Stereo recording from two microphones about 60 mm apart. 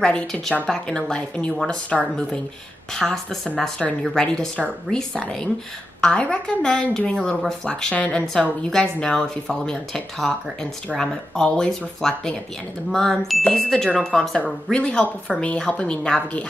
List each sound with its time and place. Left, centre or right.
0.0 s a woman's voice: centre
1.9 s a woman's voice: centre
7.9 s speech: left
8.3 s a woman's voice: centre